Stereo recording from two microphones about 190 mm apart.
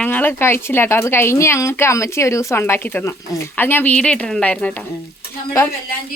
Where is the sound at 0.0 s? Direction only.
10° left (ahead or behind).